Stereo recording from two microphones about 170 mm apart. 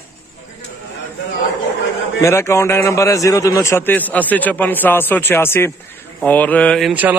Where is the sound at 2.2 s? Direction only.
15° left (ahead or behind).